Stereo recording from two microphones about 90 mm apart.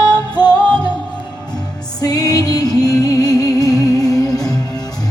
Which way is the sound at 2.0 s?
45° left (ahead or behind).